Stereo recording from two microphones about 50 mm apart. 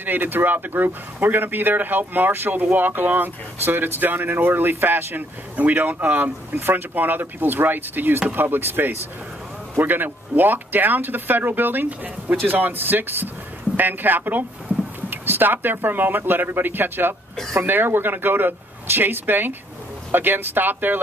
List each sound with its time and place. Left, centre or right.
0.0 s speech: right